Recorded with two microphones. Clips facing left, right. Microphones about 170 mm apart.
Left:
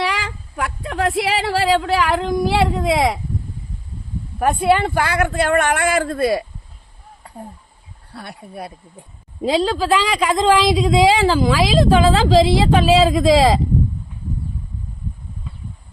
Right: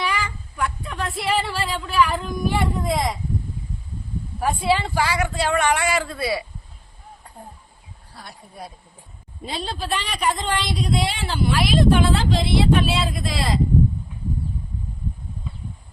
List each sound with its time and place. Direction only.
0.0 s speech: 85° left
4.4 s speech: 55° left (ahead or behind)
8.1 s speech: 65° left (ahead or behind)
9.4 s speech: 90° left